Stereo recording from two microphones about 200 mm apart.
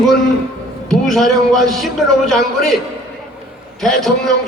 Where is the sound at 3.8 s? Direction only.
Centre (ahead or behind).